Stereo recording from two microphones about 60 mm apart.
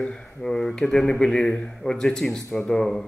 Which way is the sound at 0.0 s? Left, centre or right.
Centre.